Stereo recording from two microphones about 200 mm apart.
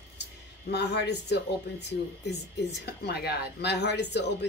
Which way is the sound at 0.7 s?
60° left (ahead or behind).